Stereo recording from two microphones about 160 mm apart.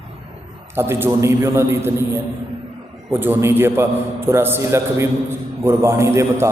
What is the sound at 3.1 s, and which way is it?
A man's voice, 15° right (ahead or behind).